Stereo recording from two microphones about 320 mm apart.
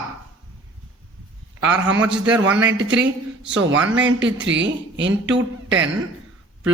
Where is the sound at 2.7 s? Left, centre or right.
Right.